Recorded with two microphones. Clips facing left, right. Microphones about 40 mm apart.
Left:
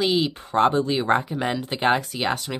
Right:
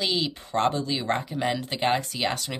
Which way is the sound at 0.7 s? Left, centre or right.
Left.